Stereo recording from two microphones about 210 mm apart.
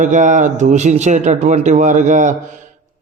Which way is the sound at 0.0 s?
35° right (ahead or behind).